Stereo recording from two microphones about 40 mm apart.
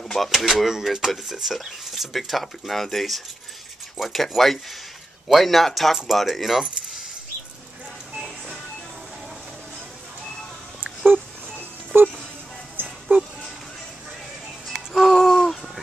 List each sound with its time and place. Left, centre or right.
0.2 s speech: centre
0.7 s speech: centre
11.1 s music: right
14.9 s a sound: centre